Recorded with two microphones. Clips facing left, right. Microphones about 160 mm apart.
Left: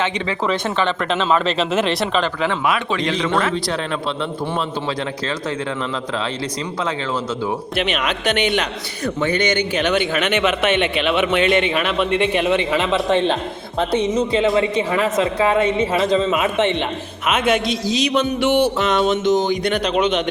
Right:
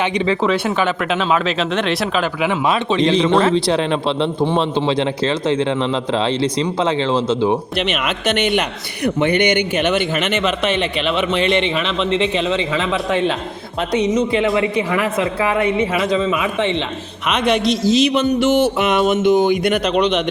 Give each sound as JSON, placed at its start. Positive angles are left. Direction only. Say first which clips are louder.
{"t": 0.4, "sound": "speech", "louder": "right 3 dB", "side_deg": -10}
{"t": 2.6, "sound": "a man's voice", "louder": "right 4 dB", "side_deg": -25}
{"t": 7.8, "sound": "speech", "louder": "right 1 dB", "side_deg": 0}
{"t": 9.3, "sound": "speech", "louder": "right 3 dB", "side_deg": -60}
{"t": 10.4, "sound": "a man's voice", "louder": "left 1 dB", "side_deg": 0}
{"t": 17.2, "sound": "speech", "louder": "right 2 dB", "side_deg": 5}
{"t": 17.8, "sound": "a sound", "louder": "right 9 dB", "side_deg": -50}
{"t": 18.1, "sound": "speech", "louder": "right 2 dB", "side_deg": 0}
{"t": 18.8, "sound": "music", "louder": "right 2 dB", "side_deg": -10}
{"t": 19.6, "sound": "speech", "louder": "right 2 dB", "side_deg": -5}